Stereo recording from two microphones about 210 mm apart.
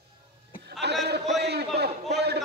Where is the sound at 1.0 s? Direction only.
50° right (ahead or behind).